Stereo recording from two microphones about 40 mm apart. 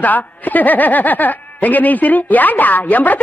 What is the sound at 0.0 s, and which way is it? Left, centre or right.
Speech, left.